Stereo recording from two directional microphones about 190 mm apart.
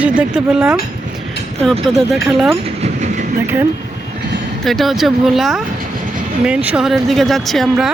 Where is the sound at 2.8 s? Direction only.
35° right (ahead or behind).